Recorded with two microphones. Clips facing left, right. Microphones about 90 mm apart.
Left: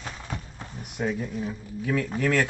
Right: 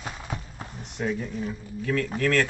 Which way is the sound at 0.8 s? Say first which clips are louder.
Even; 5° left (ahead or behind).